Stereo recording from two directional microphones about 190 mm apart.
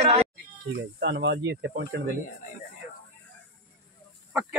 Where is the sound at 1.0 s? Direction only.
65° right (ahead or behind).